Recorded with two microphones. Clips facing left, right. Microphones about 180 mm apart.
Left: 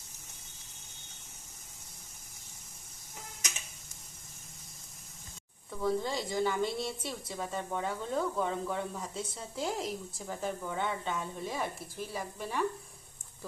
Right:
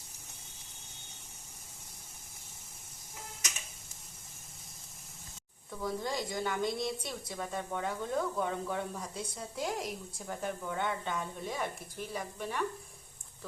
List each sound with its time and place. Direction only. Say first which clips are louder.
5.8 s a woman's voice: left 3 dB; 5° left (ahead or behind)